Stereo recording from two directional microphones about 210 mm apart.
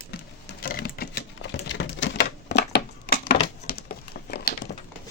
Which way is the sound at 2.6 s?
55° left (ahead or behind).